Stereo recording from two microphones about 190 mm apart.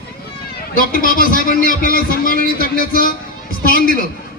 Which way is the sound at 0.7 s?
50° left (ahead or behind).